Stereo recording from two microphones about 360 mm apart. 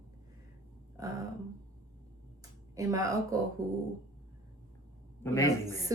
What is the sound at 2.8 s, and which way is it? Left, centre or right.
Speech, centre.